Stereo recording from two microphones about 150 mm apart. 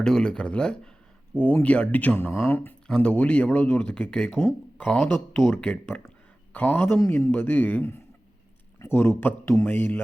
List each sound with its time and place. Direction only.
0.0 s speech: 5° left (ahead or behind)